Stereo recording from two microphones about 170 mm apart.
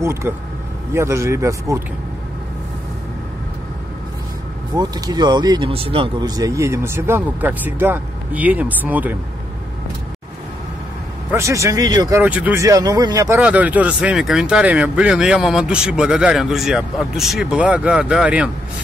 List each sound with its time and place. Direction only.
0.0 s speech: 15° right (ahead or behind)
4.7 s speech: 25° right (ahead or behind)
11.3 s speech: 15° right (ahead or behind)
12.2 s speech: 10° right (ahead or behind)
13.4 s speech: 10° right (ahead or behind)